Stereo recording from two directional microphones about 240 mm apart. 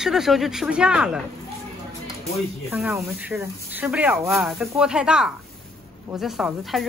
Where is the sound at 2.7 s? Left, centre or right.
Centre.